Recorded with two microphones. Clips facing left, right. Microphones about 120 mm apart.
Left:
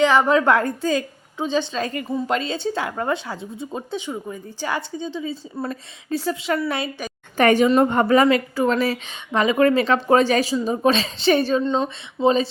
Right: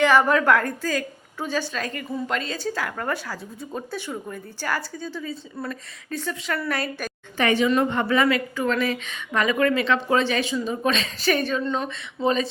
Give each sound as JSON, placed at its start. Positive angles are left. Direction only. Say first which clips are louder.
{"t": 0.0, "sound": "a woman's voice", "louder": "left 2 dB", "side_deg": 15}
{"t": 0.4, "sound": "a woman's voice", "louder": "left 2 dB", "side_deg": 25}
{"t": 7.3, "sound": "a woman's voice", "louder": "left 5 dB", "side_deg": 45}